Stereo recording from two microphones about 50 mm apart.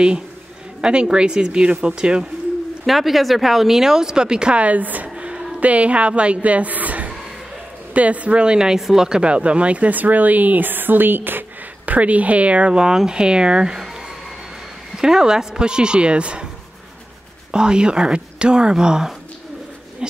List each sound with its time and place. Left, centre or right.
0.7 s a woman's voice: centre
2.9 s speech: centre; by 5.1 s right
5.1 s a sound: right
5.6 s a woman's voice: right
11.8 s speech: right
15.0 s speech: centre
17.5 s speech: centre
20.0 s a sound: centre